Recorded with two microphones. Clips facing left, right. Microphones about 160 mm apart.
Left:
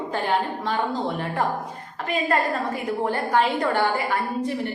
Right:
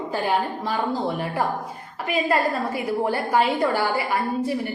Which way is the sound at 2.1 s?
10° right (ahead or behind).